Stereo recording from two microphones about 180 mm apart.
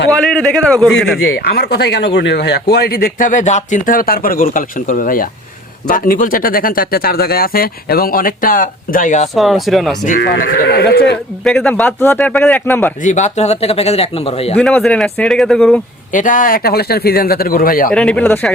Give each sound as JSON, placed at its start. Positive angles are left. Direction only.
{"t": 0.1, "sound": "speech", "side_deg": 5}
{"t": 1.2, "sound": "speech", "side_deg": 60}
{"t": 9.3, "sound": "speech", "side_deg": 0}
{"t": 10.2, "sound": "speech", "side_deg": 55}
{"t": 11.4, "sound": "a man's voice", "side_deg": 5}
{"t": 13.0, "sound": "speech", "side_deg": 45}
{"t": 14.5, "sound": "speech", "side_deg": 5}
{"t": 16.1, "sound": "speech", "side_deg": 45}
{"t": 17.9, "sound": "speech", "side_deg": 5}